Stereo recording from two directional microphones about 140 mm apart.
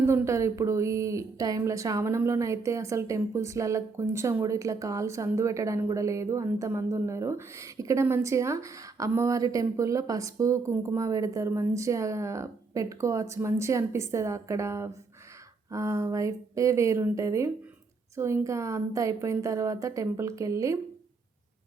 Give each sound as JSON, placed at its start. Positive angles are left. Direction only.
{"t": 0.0, "sound": "speech", "side_deg": -20}